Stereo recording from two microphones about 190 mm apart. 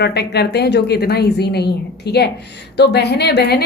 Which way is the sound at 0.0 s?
60° left (ahead or behind).